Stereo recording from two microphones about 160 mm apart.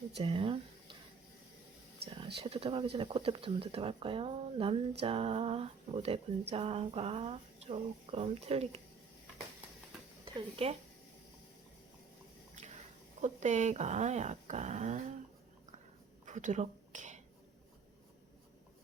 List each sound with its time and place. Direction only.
0.2 s speech: 35° right (ahead or behind)
2.0 s speech: 35° right (ahead or behind)
10.2 s speech: 35° right (ahead or behind)
13.2 s speech: 50° right (ahead or behind)
16.2 s a sound: 50° right (ahead or behind)